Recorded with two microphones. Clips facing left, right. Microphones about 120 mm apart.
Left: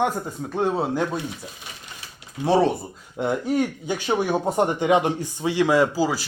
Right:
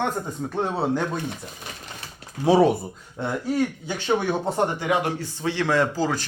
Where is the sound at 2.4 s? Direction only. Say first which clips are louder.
Right 2 dB; 5° right (ahead or behind).